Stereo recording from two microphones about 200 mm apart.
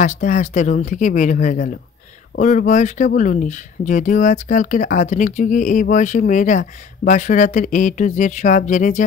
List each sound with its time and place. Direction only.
0.0 s speech: 40° left (ahead or behind)